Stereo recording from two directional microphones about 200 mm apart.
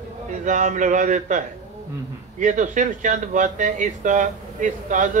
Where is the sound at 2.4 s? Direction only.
40° right (ahead or behind).